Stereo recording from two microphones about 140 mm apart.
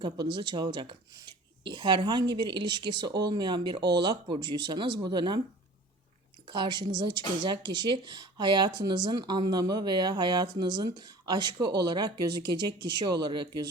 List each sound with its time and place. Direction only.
0.0 s speech: 35° right (ahead or behind)
6.5 s speech: 30° right (ahead or behind)